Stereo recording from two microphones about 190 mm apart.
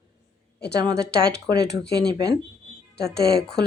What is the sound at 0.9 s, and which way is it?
A woman's voice, 60° left (ahead or behind).